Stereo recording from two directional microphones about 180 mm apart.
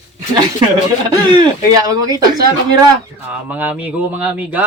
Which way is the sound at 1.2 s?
25° right (ahead or behind).